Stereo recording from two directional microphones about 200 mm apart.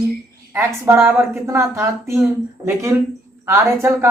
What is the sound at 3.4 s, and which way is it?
Speech, 10° right (ahead or behind).